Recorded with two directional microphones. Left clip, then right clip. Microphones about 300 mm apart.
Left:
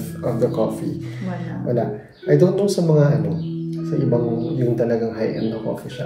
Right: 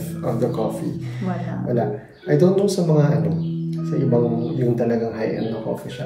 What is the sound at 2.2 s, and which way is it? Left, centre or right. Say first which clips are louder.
Speech: left 1 dB; centre.